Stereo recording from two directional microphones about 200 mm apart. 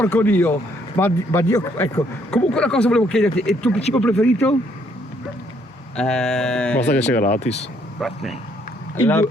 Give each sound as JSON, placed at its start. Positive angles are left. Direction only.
{"t": 0.0, "sound": "speech", "side_deg": 10}
{"t": 2.3, "sound": "speech", "side_deg": 5}
{"t": 6.0, "sound": "speech", "side_deg": 5}
{"t": 7.2, "sound": "speech", "side_deg": 35}
{"t": 8.0, "sound": "speech", "side_deg": 0}